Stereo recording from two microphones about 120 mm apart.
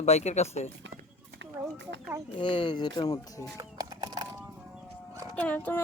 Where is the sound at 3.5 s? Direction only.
35° right (ahead or behind).